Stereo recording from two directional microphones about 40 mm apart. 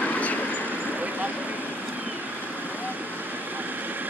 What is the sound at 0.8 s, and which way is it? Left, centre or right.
Vehicle, right.